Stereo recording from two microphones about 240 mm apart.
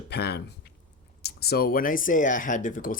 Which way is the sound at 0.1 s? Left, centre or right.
Left.